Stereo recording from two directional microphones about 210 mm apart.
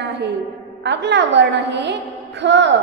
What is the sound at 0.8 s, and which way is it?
A woman's voice, 55° right (ahead or behind).